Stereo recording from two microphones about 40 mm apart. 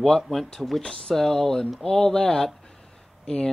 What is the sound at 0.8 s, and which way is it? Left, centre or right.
Speech, centre.